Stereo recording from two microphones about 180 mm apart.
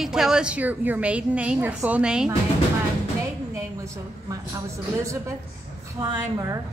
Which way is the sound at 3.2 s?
15° right (ahead or behind).